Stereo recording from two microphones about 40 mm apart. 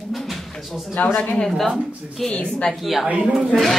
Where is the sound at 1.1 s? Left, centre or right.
Left.